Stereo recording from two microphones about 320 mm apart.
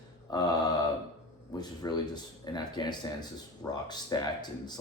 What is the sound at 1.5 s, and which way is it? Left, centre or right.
Speech, centre.